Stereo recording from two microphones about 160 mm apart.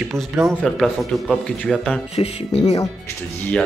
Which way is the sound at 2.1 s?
40° left (ahead or behind).